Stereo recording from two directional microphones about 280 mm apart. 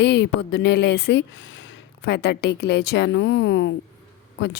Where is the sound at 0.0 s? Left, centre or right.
Left.